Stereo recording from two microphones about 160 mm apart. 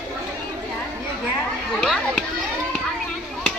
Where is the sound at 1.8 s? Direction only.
Centre (ahead or behind).